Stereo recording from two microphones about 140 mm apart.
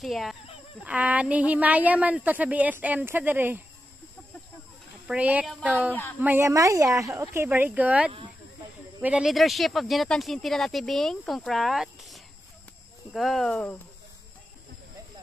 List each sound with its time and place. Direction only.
0.0 s a woman's voice: centre (ahead or behind)
5.0 s a woman's voice: 10° right (ahead or behind); by 13.7 s 10° left (ahead or behind)